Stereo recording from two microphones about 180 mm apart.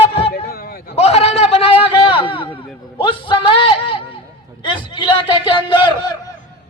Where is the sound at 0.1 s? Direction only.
30° left (ahead or behind).